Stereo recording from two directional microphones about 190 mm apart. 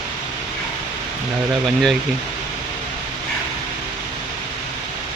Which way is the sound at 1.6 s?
Centre (ahead or behind).